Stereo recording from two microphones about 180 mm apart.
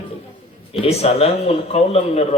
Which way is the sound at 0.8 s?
35° left (ahead or behind).